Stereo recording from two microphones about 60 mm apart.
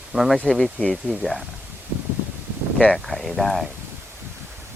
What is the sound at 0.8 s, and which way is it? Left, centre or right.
Speech, left.